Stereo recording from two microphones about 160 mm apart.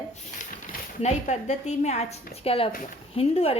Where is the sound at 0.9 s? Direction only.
45° left (ahead or behind).